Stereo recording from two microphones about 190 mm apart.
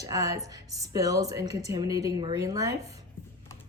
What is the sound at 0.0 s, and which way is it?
A woman's voice, 15° right (ahead or behind).